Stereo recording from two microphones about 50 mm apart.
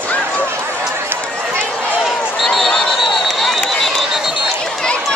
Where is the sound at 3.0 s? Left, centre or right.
Centre.